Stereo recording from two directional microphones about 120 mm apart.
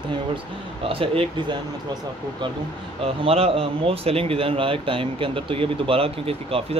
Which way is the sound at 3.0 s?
55° right (ahead or behind).